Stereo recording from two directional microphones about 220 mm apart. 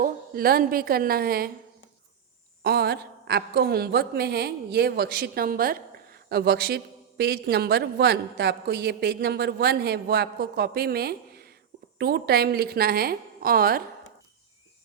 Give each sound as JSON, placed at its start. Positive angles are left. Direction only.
{"t": 0.0, "sound": "a woman's voice", "side_deg": -40}
{"t": 2.6, "sound": "a woman's voice", "side_deg": -45}